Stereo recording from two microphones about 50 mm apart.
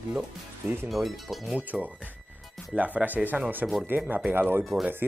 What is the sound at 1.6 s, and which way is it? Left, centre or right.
Speech, right.